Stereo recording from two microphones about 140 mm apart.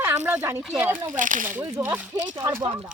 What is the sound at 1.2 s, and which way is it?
Speech, 70° right (ahead or behind).